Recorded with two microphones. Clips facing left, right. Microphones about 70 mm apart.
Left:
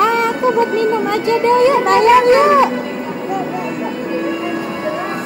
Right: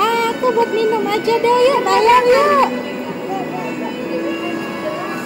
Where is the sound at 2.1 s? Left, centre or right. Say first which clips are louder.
Left 2 dB; centre.